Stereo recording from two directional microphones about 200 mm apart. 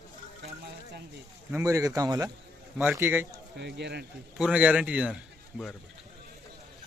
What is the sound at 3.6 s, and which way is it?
Speech, 60° right (ahead or behind).